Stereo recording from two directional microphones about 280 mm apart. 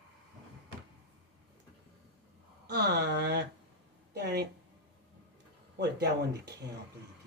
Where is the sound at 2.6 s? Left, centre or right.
Right.